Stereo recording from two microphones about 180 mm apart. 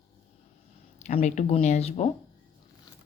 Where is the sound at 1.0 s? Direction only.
40° left (ahead or behind).